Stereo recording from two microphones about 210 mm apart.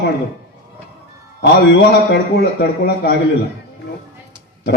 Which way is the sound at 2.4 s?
50° left (ahead or behind).